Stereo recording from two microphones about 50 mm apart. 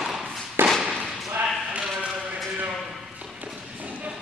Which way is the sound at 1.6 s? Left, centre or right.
Right.